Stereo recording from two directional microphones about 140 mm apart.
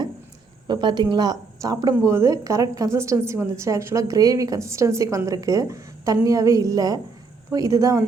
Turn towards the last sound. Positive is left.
turn(degrees=-25)  # may be behind; listen again after turning